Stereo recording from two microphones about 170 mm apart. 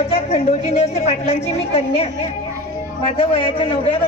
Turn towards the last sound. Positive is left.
turn(degrees=35)  # may be behind; listen again after turning